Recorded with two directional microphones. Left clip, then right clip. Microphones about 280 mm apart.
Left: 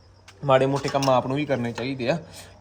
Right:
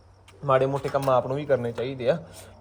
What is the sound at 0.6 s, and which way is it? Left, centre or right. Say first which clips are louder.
Speech: left 2 dB; left.